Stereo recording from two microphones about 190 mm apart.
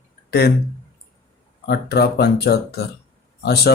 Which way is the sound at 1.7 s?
55° left (ahead or behind).